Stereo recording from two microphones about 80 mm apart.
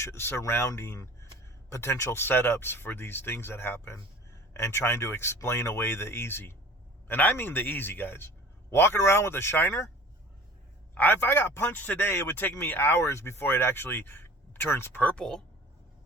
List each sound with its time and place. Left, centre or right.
0.0 s a man's voice: left
10.9 s a man's voice: left
15.1 s speech: centre